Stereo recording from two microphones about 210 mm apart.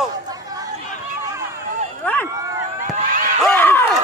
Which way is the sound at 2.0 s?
10° left (ahead or behind).